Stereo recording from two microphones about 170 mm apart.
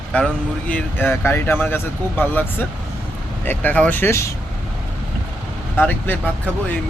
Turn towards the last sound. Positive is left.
turn(degrees=10)  # may be behind; listen again after turning